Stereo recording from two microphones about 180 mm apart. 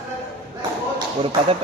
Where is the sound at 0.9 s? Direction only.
30° right (ahead or behind).